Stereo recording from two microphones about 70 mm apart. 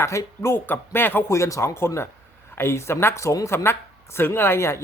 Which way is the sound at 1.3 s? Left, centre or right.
Left.